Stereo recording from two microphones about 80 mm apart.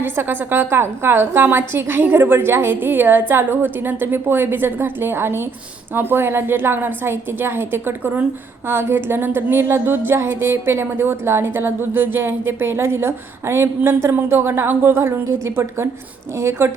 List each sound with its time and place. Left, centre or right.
0.0 s a woman's voice: right
8.6 s music: right